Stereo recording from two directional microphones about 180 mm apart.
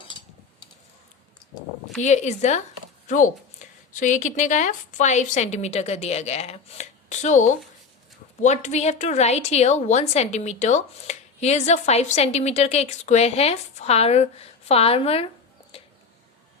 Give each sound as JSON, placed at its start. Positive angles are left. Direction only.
{"t": 2.0, "sound": "a woman's voice", "side_deg": 40}